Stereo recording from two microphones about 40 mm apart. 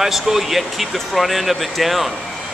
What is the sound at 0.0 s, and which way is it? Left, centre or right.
Speech, centre.